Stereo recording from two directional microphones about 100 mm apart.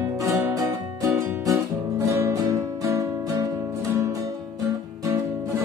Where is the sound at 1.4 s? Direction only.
35° right (ahead or behind).